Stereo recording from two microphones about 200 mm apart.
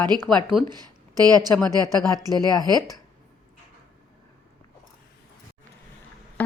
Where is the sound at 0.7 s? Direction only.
20° right (ahead or behind).